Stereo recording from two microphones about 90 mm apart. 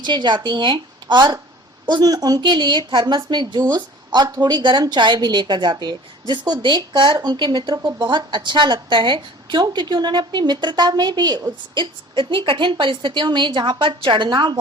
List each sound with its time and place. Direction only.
0.0 s a woman's voice: 55° right (ahead or behind)
2.4 s a woman's voice: 60° right (ahead or behind)
9.6 s a woman's voice: 55° right (ahead or behind)